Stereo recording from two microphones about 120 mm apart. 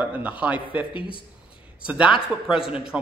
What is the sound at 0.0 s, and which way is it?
Speech, 15° right (ahead or behind).